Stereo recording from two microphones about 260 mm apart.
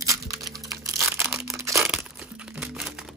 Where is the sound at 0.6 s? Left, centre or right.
Centre.